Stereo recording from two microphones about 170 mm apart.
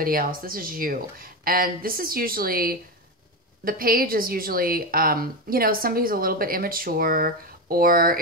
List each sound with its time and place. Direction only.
0.0 s a woman's voice: 60° right (ahead or behind)